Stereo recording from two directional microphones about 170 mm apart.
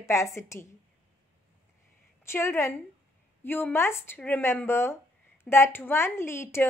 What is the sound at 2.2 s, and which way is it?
A woman's voice, 15° left (ahead or behind).